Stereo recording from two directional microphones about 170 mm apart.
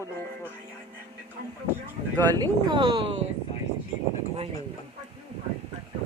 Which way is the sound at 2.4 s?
30° right (ahead or behind).